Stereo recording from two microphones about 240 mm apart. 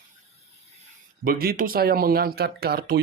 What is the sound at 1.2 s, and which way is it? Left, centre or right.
Speech, right.